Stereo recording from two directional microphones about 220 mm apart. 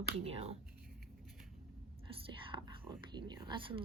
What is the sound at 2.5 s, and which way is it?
Whispering, 20° right (ahead or behind).